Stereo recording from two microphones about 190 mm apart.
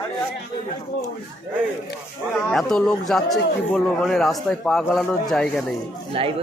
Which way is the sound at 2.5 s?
5° left (ahead or behind).